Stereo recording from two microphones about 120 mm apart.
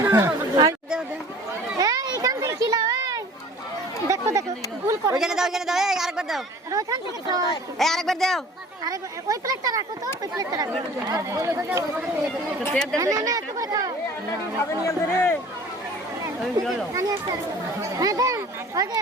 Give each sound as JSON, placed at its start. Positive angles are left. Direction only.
{"t": 0.0, "sound": "speech", "side_deg": -25}
{"t": 0.5, "sound": "chatter", "side_deg": -35}
{"t": 1.8, "sound": "children playing", "side_deg": -30}
{"t": 4.1, "sound": "chatter", "side_deg": -25}
{"t": 5.1, "sound": "speech", "side_deg": -5}
{"t": 6.7, "sound": "speech", "side_deg": -30}
{"t": 7.8, "sound": "speech", "side_deg": 0}
{"t": 8.8, "sound": "speech", "side_deg": -30}
{"t": 12.7, "sound": "speech", "side_deg": 5}
{"t": 13.0, "sound": "speech", "side_deg": -30}
{"t": 14.8, "sound": "speech", "side_deg": 20}
{"t": 16.9, "sound": "speech", "side_deg": -30}